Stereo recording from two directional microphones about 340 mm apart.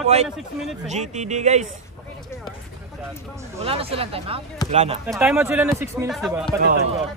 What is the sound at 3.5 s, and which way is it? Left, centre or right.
Speech, centre.